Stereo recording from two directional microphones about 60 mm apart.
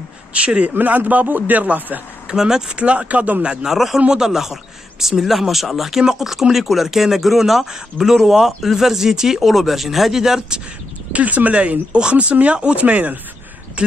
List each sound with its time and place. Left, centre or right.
0.3 s speech: right
2.2 s speech: centre
3.6 s speech: centre
11.1 s speech: right